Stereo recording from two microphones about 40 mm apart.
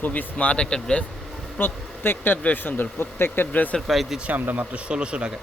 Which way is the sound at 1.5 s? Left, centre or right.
Left.